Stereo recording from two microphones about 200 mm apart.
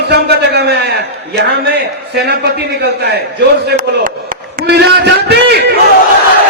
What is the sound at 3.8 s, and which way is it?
A man's voice, 45° right (ahead or behind).